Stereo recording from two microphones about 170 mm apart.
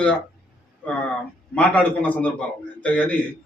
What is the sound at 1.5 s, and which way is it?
A man's voice, 10° left (ahead or behind).